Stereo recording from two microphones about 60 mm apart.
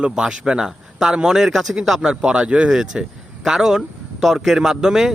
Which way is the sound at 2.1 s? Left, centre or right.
Centre.